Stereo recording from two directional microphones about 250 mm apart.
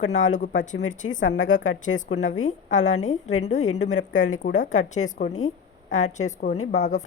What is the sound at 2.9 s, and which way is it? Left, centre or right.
Speech, left.